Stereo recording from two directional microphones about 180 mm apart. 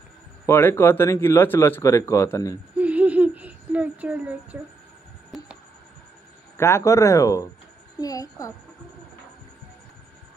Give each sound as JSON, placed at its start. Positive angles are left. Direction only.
{"t": 0.5, "sound": "speech", "side_deg": 10}
{"t": 2.8, "sound": "a sound", "side_deg": -10}
{"t": 6.5, "sound": "a woman's voice", "side_deg": 15}